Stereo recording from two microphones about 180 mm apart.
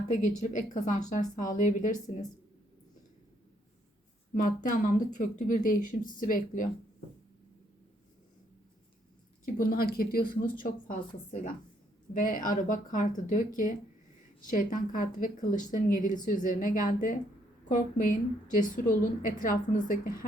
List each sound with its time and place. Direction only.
0.1 s speech: 45° left (ahead or behind)
4.4 s speech: 50° left (ahead or behind)
9.6 s a woman's voice: 55° left (ahead or behind)